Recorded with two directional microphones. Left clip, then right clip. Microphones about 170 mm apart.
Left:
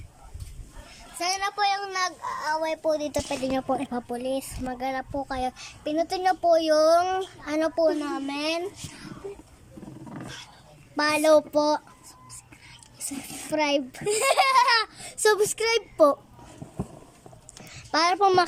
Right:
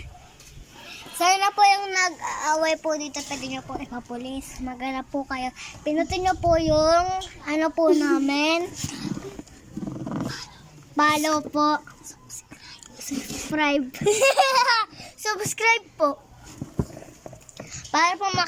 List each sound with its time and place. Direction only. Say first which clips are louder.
1.2 s child singing: right 8 dB; 5° left (ahead or behind)
2.4 s speech: right 5 dB; 5° left (ahead or behind)
2.8 s speech: left 2 dB; 20° left (ahead or behind)
7.9 s a child's voice: right 6 dB; 5° right (ahead or behind)
10.9 s speech: left 1 dB; 10° left (ahead or behind)
13.1 s a child's voice: right 1 dB; 10° left (ahead or behind)
14.0 s speech: right 4 dB; 20° right (ahead or behind)
14.7 s a child's voice: right 1 dB; centre (ahead or behind)
15.2 s speech: left 7 dB; 25° left (ahead or behind)
15.4 s speech: right 4 dB; 10° left (ahead or behind)
16.0 s a child's voice: left 8 dB; 20° left (ahead or behind)
17.7 s babbling: right 2 dB; 10° left (ahead or behind)
18.2 s a child's voice: left 4 dB; 25° left (ahead or behind)